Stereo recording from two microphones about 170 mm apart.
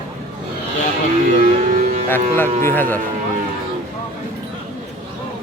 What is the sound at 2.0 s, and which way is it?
Speech, 10° left (ahead or behind).